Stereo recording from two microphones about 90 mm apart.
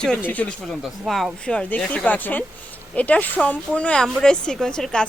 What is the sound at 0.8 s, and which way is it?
Speech, centre (ahead or behind).